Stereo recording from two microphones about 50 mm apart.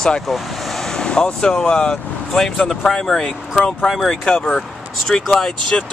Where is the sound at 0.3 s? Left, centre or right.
Centre.